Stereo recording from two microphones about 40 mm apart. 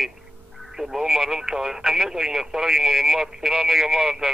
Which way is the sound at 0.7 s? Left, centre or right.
Centre.